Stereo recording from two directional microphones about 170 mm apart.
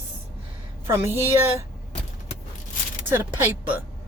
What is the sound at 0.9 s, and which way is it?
Speech, 15° right (ahead or behind).